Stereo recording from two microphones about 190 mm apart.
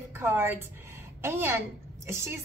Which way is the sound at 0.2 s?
10° right (ahead or behind).